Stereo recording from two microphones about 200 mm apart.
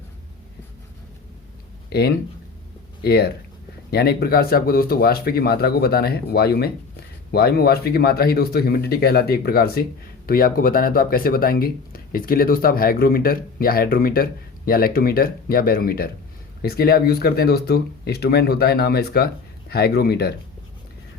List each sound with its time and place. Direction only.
1.9 s speech: 55° left (ahead or behind)